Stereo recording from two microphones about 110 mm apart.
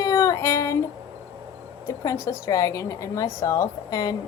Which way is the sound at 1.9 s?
25° left (ahead or behind).